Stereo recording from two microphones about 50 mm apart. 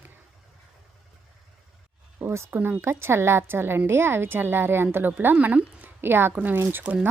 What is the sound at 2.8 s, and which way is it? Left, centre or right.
A woman's voice, right.